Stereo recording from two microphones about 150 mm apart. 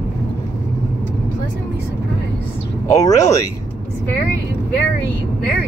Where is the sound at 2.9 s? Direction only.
20° left (ahead or behind).